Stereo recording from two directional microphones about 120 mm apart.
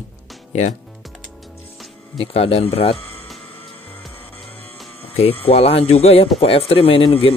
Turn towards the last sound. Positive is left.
turn(degrees=55)  # may be behind; listen again after turning